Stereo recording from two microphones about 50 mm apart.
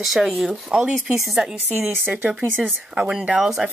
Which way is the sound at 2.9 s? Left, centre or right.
Centre.